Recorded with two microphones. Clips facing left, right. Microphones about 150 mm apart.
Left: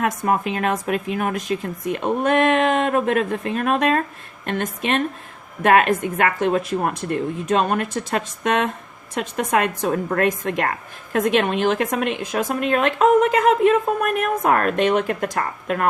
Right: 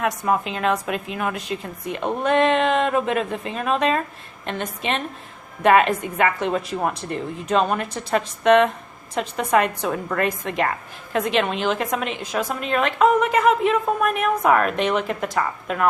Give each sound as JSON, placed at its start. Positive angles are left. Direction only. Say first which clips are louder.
{"t": 0.0, "sound": "a woman's voice", "louder": "left 1 dB", "side_deg": 50}